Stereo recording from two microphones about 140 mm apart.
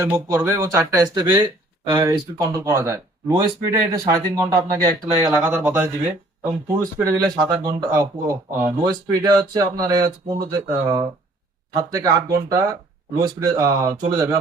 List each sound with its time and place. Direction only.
0.0 s speech: 15° right (ahead or behind)